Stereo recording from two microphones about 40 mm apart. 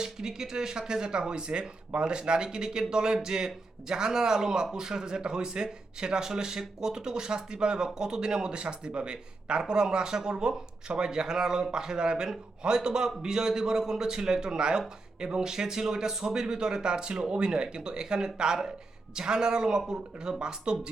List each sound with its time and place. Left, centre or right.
0.0 s speech: centre